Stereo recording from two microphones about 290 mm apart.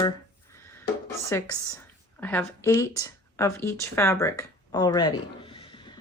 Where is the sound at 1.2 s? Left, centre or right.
Centre.